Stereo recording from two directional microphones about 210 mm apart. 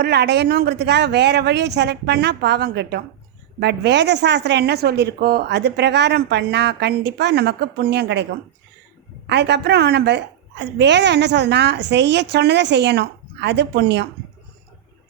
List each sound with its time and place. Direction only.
0.0 s a woman's voice: 50° right (ahead or behind)